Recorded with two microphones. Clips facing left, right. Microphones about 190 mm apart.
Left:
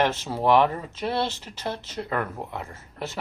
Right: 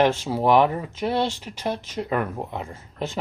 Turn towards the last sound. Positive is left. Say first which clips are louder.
# right 4 dB
turn(degrees=-15)  # may be behind; listen again after turning